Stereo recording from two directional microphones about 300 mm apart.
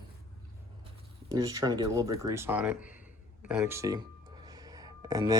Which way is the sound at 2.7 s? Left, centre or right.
Left.